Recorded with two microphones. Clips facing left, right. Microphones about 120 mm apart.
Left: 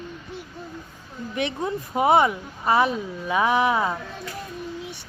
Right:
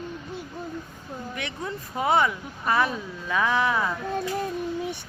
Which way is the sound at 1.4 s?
20° left (ahead or behind).